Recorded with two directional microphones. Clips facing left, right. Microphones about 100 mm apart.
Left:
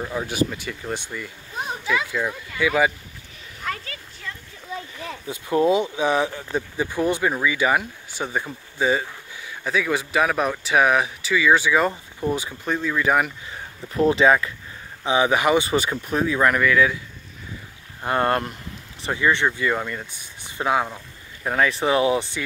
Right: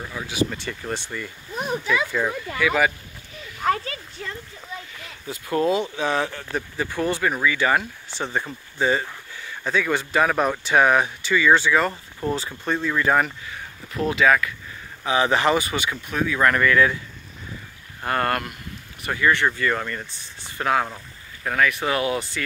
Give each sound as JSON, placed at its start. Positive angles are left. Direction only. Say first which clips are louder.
{"t": 0.5, "sound": "speech", "louder": "even", "side_deg": 5}
{"t": 2.2, "sound": "speech", "louder": "right 1 dB", "side_deg": -10}
{"t": 2.6, "sound": "speech", "louder": "left 1 dB", "side_deg": 20}
{"t": 3.6, "sound": "a sound", "louder": "right 8 dB", "side_deg": -35}
{"t": 5.2, "sound": "speech", "louder": "left 2 dB", "side_deg": 20}
{"t": 13.5, "sound": "speech", "louder": "left 1 dB", "side_deg": 30}
{"t": 15.0, "sound": "speech", "louder": "left 1 dB", "side_deg": 15}
{"t": 15.7, "sound": "speech", "louder": "left 4 dB", "side_deg": 35}
{"t": 16.3, "sound": "speech", "louder": "right 1 dB", "side_deg": 10}
{"t": 18.0, "sound": "speech", "louder": "left 2 dB", "side_deg": 20}
{"t": 19.2, "sound": "speech", "louder": "even", "side_deg": 15}